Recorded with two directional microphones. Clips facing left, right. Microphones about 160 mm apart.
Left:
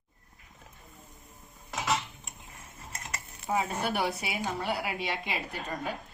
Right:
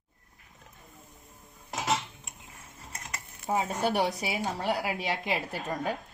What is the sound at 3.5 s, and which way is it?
A woman's voice, 35° right (ahead or behind).